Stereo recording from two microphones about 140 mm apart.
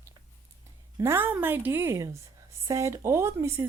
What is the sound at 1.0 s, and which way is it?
Speech, 15° right (ahead or behind).